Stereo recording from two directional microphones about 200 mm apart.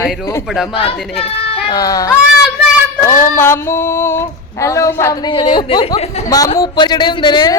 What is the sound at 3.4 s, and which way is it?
Female singing, 10° left (ahead or behind).